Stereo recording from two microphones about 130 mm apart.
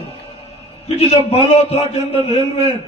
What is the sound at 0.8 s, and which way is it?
A man's voice, 50° left (ahead or behind).